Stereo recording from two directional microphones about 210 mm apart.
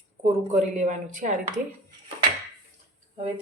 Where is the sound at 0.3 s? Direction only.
35° right (ahead or behind).